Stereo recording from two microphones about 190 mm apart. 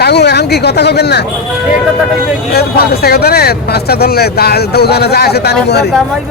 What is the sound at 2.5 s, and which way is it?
Speech, 55° left (ahead or behind).